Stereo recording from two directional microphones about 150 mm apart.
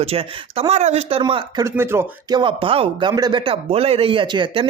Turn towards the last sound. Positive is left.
turn(degrees=-35)  # may be behind; listen again after turning